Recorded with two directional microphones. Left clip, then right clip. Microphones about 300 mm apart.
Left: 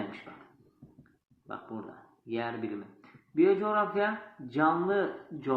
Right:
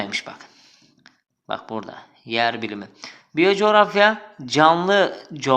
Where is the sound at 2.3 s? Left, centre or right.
Right.